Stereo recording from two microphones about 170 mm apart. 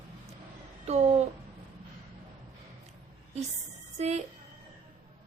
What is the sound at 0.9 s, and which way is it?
Speech, 40° right (ahead or behind).